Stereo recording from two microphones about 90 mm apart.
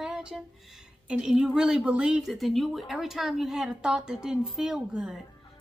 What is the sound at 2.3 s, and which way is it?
A woman's voice, centre (ahead or behind).